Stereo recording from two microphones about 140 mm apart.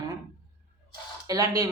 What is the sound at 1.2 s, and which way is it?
Speech, 25° right (ahead or behind).